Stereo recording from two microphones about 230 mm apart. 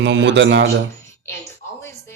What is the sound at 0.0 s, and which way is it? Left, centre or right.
Speech, right.